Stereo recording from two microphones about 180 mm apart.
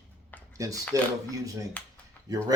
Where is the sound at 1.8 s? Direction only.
10° left (ahead or behind).